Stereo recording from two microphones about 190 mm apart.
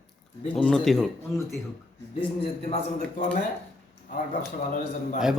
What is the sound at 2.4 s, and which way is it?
Speech, 35° left (ahead or behind).